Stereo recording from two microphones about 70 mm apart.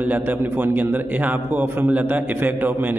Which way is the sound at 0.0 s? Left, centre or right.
Right.